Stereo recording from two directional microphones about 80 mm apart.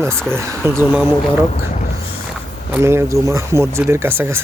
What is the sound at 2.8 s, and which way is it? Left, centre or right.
Speech, right.